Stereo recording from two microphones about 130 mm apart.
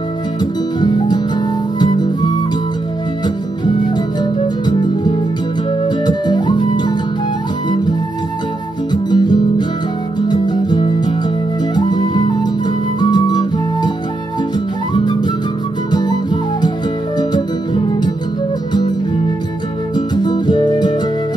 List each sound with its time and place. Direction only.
0.7 s music: 35° left (ahead or behind)
5.9 s music: 35° left (ahead or behind)
8.9 s music: 35° left (ahead or behind)
11.7 s flute: 35° left (ahead or behind)
13.0 s music: 35° left (ahead or behind)
15.0 s music: 35° left (ahead or behind)
20.2 s music: 35° left (ahead or behind)